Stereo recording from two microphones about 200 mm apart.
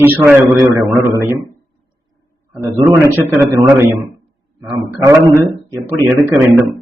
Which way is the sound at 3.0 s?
15° right (ahead or behind).